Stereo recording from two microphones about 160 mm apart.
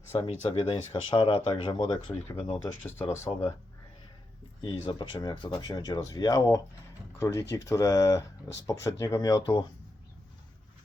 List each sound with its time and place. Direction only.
0.2 s speech: 40° left (ahead or behind)
2.8 s speech: 15° left (ahead or behind)
4.6 s speech: 30° left (ahead or behind)